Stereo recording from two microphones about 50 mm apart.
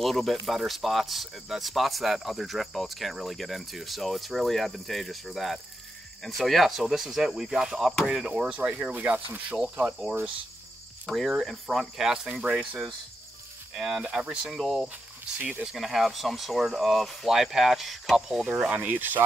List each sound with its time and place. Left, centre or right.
0.0 s speech: centre; by 8.5 s right
8.5 s speech: right
9.6 s speech: right
11.1 s speech: centre
11.8 s speech: centre
14.6 s speech: centre
15.3 s speech: right
15.7 s speech: centre
18.7 s speech: right